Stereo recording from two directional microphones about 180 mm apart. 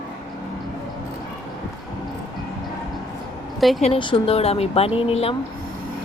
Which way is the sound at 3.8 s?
30° left (ahead or behind).